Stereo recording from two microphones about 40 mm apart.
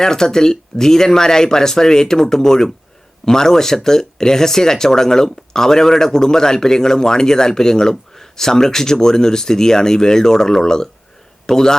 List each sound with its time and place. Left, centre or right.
0.0 s a man's voice: centre